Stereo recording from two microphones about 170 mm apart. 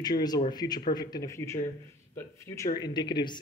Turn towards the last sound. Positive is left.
turn(degrees=25)  # may be behind; listen again after turning